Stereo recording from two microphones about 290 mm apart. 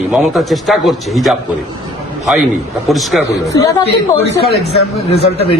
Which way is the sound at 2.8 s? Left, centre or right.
Centre.